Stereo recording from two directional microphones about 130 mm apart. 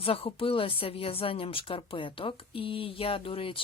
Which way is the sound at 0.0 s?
45° left (ahead or behind).